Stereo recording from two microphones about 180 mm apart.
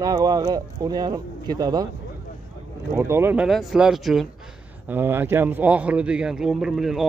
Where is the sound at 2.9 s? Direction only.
15° right (ahead or behind).